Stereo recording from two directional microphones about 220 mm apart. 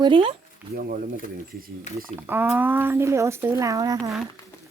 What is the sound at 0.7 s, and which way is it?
Speech, 40° right (ahead or behind).